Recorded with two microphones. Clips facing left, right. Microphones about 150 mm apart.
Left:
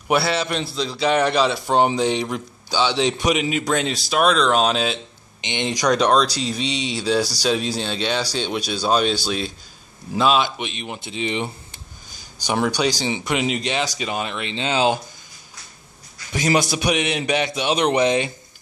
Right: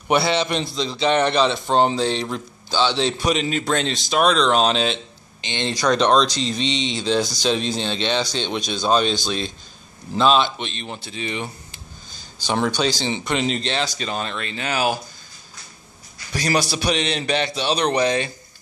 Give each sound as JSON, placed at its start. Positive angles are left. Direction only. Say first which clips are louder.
{"t": 0.1, "sound": "a man's voice", "louder": "right 1 dB", "side_deg": 5}
{"t": 5.4, "sound": "a man's voice", "louder": "left 1 dB", "side_deg": 15}
{"t": 16.3, "sound": "a man's voice", "louder": "left 2 dB", "side_deg": 20}